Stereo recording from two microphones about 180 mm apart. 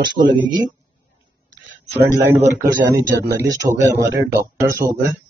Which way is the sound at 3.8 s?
15° right (ahead or behind).